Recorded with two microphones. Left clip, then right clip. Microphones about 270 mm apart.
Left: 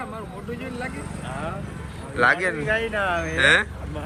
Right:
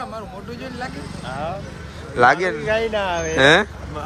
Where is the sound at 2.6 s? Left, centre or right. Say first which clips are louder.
Right 3 dB; right; by 3.6 s centre.